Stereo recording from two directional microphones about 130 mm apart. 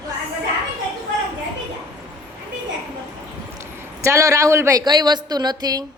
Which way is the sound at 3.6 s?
20° right (ahead or behind).